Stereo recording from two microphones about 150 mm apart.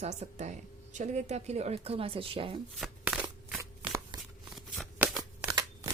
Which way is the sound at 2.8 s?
10° right (ahead or behind).